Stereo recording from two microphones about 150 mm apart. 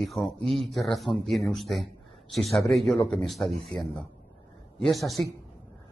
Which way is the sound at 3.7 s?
30° left (ahead or behind).